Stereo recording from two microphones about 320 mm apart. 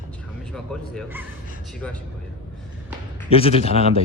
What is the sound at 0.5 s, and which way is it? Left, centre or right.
Speech, centre.